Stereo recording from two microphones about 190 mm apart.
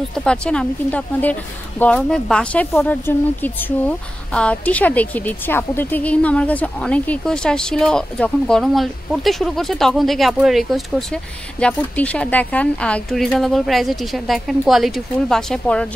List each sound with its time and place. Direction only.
0.1 s a woman's voice: 5° left (ahead or behind)